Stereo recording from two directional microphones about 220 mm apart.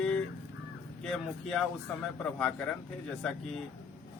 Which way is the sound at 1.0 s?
Centre (ahead or behind).